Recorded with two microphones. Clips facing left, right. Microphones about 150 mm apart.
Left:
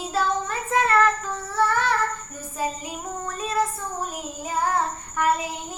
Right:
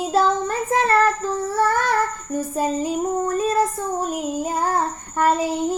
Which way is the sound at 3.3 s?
40° right (ahead or behind).